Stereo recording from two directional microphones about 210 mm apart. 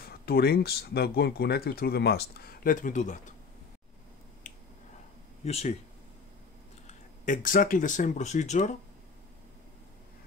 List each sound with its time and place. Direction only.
0.0 s speech: 50° left (ahead or behind)
4.4 s finger snapping: 40° left (ahead or behind)
5.4 s speech: 30° left (ahead or behind)
6.9 s speech: 40° left (ahead or behind)